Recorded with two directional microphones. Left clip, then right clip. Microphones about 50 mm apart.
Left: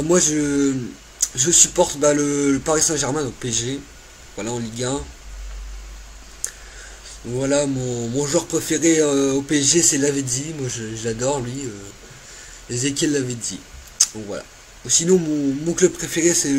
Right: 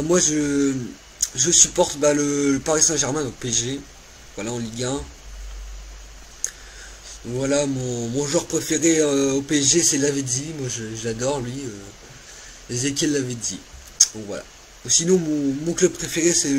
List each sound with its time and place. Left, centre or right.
0.0 s speech: left
6.4 s a sound: centre
7.3 s speech: centre
12.6 s speech: centre